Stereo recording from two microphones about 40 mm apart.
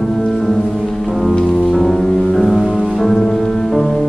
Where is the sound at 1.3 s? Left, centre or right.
Centre.